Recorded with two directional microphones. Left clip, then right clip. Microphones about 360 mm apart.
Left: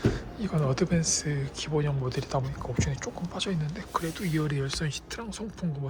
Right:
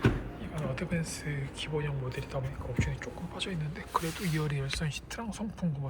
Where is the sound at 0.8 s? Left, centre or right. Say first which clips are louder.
Left 9 dB; centre.